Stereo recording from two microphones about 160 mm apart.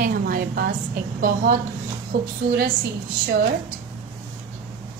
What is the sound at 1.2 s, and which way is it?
Speech, 60° right (ahead or behind).